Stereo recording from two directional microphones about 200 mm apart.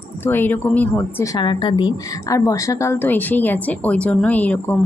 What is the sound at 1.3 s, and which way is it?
A woman's voice, 25° left (ahead or behind).